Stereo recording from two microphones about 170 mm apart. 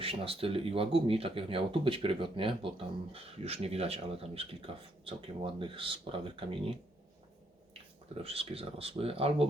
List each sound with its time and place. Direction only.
0.0 s speech: 35° right (ahead or behind)
8.2 s speech: 35° right (ahead or behind)